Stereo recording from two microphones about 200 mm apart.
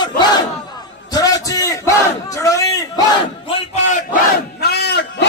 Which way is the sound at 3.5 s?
40° left (ahead or behind).